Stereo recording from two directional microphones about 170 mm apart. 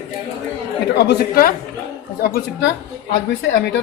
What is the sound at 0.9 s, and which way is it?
Speech, 65° left (ahead or behind).